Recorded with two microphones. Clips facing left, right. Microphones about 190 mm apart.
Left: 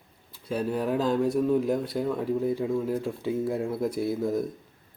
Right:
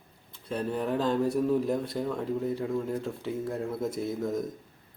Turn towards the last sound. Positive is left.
turn(degrees=5)  # may be behind; listen again after turning